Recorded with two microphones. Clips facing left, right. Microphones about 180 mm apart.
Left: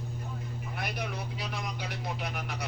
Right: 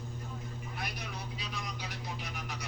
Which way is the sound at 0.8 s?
60° left (ahead or behind).